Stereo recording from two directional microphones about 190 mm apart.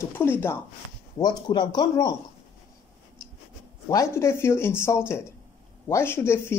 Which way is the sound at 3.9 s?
15° left (ahead or behind).